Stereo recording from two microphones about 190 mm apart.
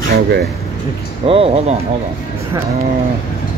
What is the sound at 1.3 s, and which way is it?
Speech, 30° right (ahead or behind).